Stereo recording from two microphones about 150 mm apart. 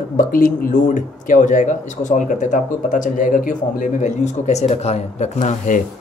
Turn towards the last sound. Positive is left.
turn(degrees=55)  # may be behind; listen again after turning